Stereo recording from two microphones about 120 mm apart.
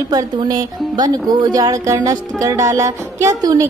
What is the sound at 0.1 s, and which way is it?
Speech, 30° right (ahead or behind).